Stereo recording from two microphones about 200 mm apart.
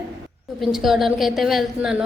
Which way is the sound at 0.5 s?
Centre (ahead or behind).